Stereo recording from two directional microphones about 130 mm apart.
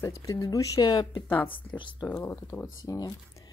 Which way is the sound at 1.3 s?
15° left (ahead or behind).